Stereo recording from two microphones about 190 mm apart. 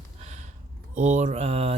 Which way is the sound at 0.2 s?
40° right (ahead or behind).